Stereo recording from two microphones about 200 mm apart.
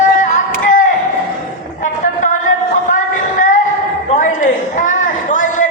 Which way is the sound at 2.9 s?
40° left (ahead or behind).